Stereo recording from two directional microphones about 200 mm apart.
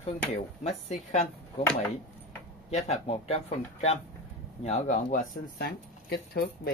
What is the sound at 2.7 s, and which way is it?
Speech, 30° left (ahead or behind).